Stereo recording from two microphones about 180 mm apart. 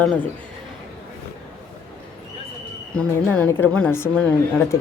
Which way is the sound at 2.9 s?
5° left (ahead or behind).